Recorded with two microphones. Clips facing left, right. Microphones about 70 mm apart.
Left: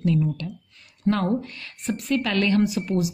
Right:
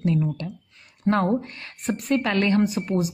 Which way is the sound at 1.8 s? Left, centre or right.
Right.